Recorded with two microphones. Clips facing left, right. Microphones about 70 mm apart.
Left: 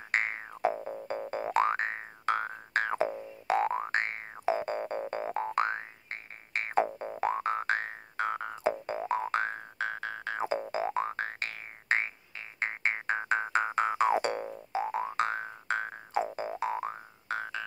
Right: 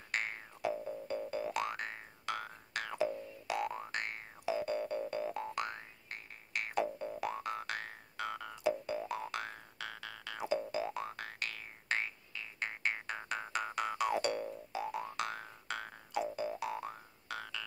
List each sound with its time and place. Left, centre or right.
0.1 s music: left
0.6 s boing: left